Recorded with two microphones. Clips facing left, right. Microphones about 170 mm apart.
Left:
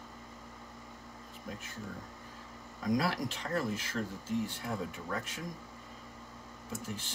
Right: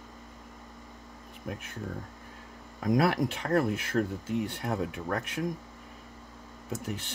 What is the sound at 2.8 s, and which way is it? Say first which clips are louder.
Speech: right 6 dB; 60° right (ahead or behind).